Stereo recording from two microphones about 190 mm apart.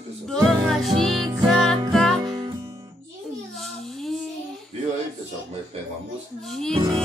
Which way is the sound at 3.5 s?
Centre (ahead or behind).